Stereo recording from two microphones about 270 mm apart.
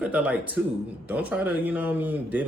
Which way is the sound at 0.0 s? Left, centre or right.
Centre.